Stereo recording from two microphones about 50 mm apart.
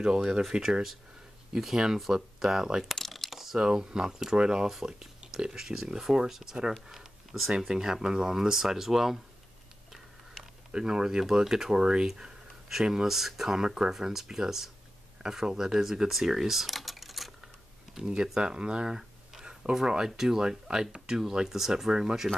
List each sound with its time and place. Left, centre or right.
0.0 s speech: centre
2.8 s a sound: centre
3.5 s speech: centre
6.9 s a sound: centre
7.6 s speech: centre
10.7 s speech: centre
17.9 s speech: centre